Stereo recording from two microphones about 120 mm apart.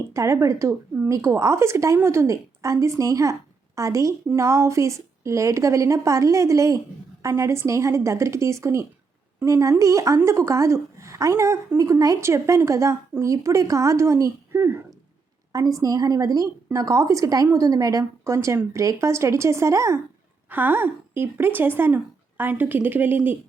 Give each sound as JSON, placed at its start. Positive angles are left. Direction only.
{"t": 0.1, "sound": "a woman's voice", "side_deg": -25}